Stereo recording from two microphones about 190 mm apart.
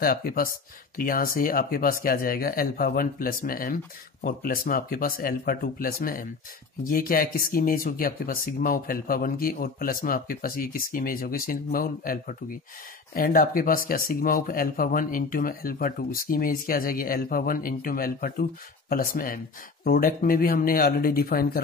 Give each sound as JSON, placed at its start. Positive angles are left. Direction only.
{"t": 0.0, "sound": "speech", "side_deg": 50}